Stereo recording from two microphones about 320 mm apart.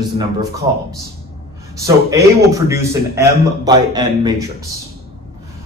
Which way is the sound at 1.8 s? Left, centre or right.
Centre.